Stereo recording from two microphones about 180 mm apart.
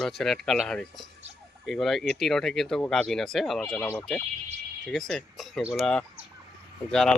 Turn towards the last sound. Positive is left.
turn(degrees=5)  # may be behind; listen again after turning